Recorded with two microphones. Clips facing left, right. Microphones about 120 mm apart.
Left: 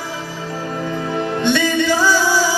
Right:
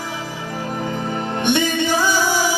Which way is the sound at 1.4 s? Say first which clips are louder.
Left 1 dB; 15° right (ahead or behind).